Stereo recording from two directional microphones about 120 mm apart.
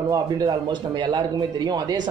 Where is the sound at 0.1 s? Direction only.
35° right (ahead or behind).